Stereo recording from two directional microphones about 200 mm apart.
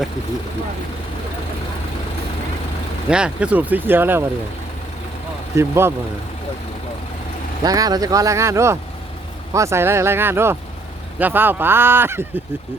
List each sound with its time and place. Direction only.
3.1 s speech: 5° right (ahead or behind)
5.5 s speech: 10° right (ahead or behind)
7.6 s speech: 20° right (ahead or behind)